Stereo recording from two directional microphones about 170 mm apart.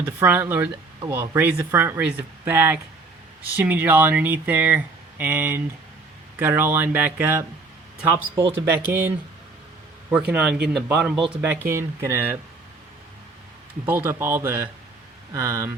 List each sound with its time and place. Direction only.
0.0 s speech: 10° right (ahead or behind)
13.8 s speech: 15° right (ahead or behind)